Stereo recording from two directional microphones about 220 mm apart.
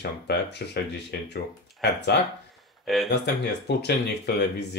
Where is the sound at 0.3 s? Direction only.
50° left (ahead or behind).